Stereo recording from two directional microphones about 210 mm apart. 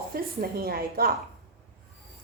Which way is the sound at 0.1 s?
45° right (ahead or behind).